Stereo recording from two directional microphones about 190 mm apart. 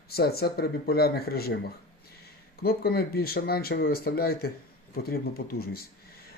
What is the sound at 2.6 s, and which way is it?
Speech, 55° left (ahead or behind).